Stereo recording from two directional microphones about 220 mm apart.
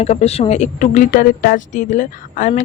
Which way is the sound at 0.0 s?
30° left (ahead or behind).